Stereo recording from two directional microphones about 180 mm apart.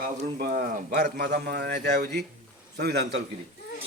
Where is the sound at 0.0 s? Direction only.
55° right (ahead or behind).